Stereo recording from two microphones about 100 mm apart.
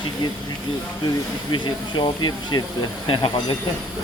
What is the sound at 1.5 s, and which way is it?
Speech, 50° left (ahead or behind).